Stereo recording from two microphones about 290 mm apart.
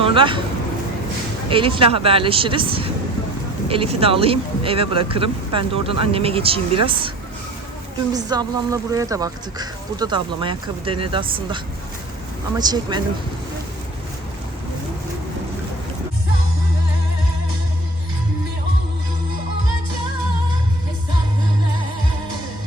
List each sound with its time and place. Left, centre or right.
0.0 s speech: centre
1.5 s speech: centre
8.1 s speech: centre